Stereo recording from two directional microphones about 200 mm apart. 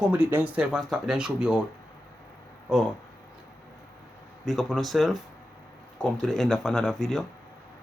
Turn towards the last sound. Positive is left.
turn(degrees=0)  # may be behind; listen again after turning